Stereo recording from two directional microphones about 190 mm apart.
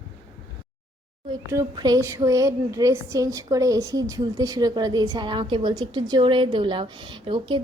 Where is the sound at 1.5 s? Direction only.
20° right (ahead or behind).